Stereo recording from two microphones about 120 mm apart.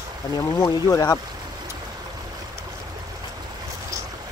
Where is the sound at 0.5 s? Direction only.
25° left (ahead or behind).